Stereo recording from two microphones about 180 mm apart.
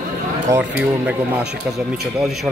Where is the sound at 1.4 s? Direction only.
Centre (ahead or behind).